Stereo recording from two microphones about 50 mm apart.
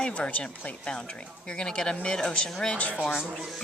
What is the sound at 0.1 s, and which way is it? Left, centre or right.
A woman's voice, left.